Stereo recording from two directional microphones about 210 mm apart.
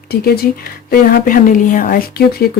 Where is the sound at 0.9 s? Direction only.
40° left (ahead or behind).